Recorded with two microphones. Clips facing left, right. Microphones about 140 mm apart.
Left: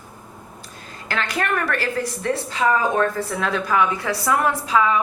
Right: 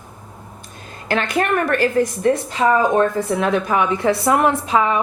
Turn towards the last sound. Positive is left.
turn(degrees=-25)  # may be behind; listen again after turning